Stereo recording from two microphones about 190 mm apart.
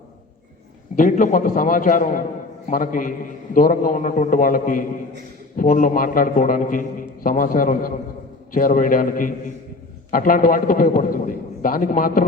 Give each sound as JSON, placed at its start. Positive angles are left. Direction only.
{"t": 0.9, "sound": "a man's voice", "side_deg": 45}